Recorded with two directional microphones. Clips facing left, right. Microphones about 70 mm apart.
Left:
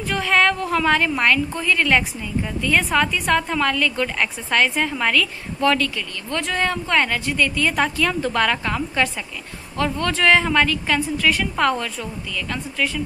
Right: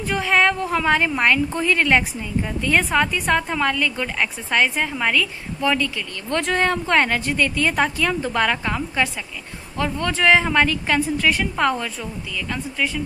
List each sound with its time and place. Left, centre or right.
0.1 s a woman's voice: centre
2.6 s a woman's voice: right; by 6.0 s centre
6.3 s speech: right
7.7 s a woman's voice: centre
11.5 s a woman's voice: centre